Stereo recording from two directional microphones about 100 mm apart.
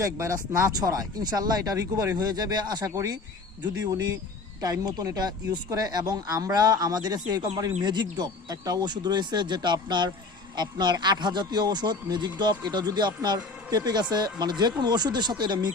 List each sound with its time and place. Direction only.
0.0 s speech: 30° right (ahead or behind)
4.6 s speech: 40° right (ahead or behind)